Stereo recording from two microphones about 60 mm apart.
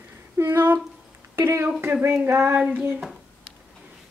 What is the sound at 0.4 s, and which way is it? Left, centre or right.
Speech, right.